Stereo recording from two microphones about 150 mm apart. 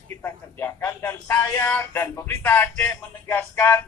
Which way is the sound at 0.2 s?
15° left (ahead or behind).